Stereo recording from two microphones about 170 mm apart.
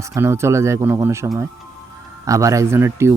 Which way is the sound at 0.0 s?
15° right (ahead or behind).